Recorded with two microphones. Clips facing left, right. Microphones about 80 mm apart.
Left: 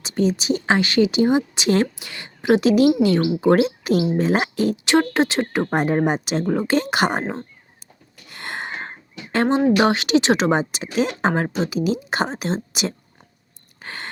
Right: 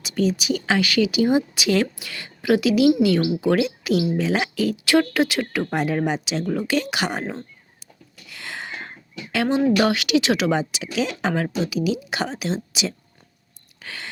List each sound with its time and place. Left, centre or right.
0.0 s speech: left
8.3 s speech: left
13.8 s a sound: left